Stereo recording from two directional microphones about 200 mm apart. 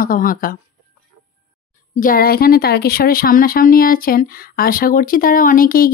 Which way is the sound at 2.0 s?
45° left (ahead or behind).